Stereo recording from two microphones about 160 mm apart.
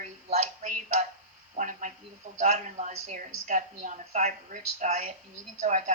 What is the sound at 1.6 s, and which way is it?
A woman's voice, 50° right (ahead or behind).